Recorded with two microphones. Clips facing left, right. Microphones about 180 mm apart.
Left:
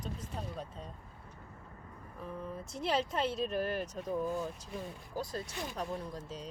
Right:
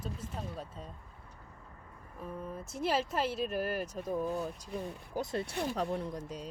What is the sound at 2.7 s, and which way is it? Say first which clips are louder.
Speech: right 1 dB; 5° right (ahead or behind).